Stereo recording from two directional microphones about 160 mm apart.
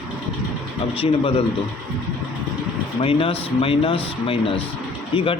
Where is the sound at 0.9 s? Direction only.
35° left (ahead or behind).